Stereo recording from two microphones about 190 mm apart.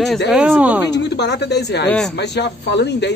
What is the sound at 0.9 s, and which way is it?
Speech, 65° left (ahead or behind).